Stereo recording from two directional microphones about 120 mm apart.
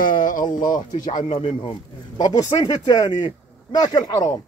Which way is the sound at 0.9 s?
35° left (ahead or behind).